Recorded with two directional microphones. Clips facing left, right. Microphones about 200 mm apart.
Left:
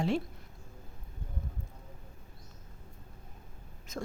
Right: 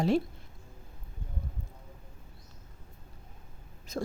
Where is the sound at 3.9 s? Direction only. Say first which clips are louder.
Right 5 dB; 35° right (ahead or behind).